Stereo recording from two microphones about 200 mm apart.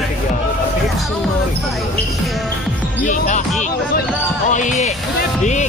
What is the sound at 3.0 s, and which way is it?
Basketball bounce, 40° left (ahead or behind).